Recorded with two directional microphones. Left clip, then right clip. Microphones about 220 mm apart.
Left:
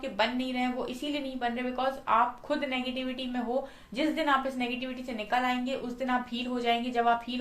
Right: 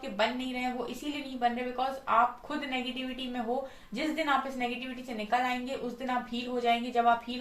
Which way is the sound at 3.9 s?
40° left (ahead or behind).